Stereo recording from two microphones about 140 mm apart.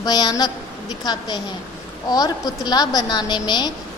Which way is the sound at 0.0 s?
30° left (ahead or behind).